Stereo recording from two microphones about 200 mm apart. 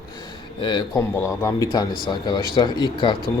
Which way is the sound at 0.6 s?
25° left (ahead or behind).